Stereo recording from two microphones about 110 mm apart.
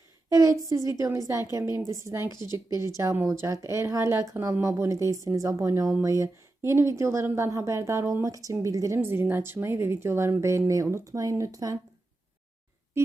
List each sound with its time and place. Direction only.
0.3 s speech: 30° right (ahead or behind)